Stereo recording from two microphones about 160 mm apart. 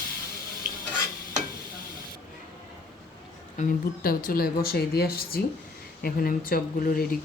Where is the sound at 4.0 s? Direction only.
65° left (ahead or behind).